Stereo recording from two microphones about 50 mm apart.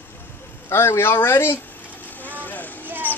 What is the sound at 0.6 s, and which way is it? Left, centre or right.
Speech, left.